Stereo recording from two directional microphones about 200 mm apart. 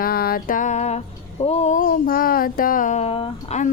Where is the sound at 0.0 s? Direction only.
50° left (ahead or behind).